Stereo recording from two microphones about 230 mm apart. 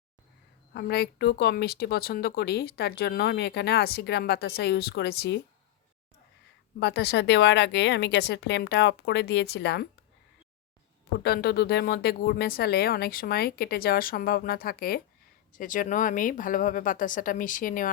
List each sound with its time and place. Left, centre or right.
0.7 s speech: left
6.7 s speech: left
11.2 s speech: left